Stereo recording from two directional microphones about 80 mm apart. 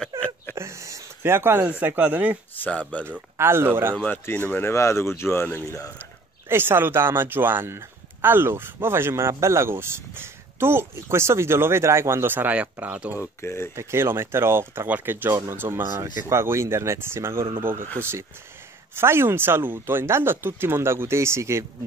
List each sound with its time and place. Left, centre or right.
0.1 s a sound: right
0.6 s speech: right; by 2.3 s centre
2.5 s speech: centre
3.1 s a man's voice: right
3.9 s speech: centre
6.5 s a man's voice: right
13.2 s speech: left
13.7 s a man's voice: right
18.9 s speech: right